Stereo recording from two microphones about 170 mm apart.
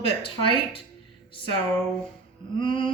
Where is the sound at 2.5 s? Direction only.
30° left (ahead or behind).